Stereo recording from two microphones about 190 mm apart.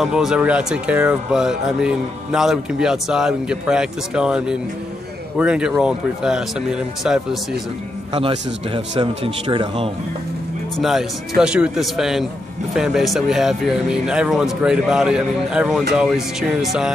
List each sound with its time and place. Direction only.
0.0 s speech: centre (ahead or behind)
8.1 s a man's voice: 30° right (ahead or behind)
10.8 s speech: centre (ahead or behind)